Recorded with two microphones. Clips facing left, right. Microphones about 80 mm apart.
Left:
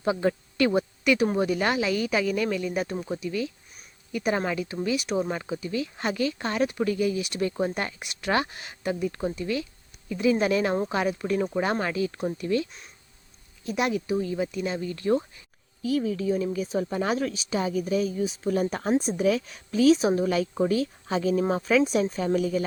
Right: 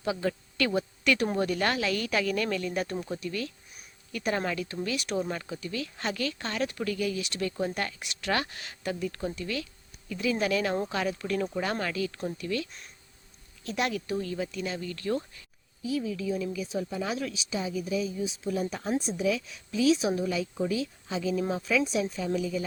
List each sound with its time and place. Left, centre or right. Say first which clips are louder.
0.0 s speech: left 5 dB; left
13.7 s speech: left 4 dB; centre
15.8 s a woman's voice: left 5 dB; left